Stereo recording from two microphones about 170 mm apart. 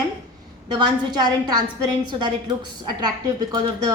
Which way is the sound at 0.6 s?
25° right (ahead or behind).